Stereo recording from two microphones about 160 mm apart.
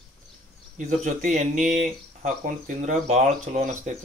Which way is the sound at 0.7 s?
55° right (ahead or behind).